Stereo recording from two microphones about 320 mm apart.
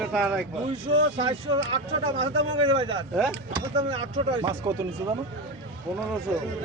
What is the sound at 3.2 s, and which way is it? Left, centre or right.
Speech, centre.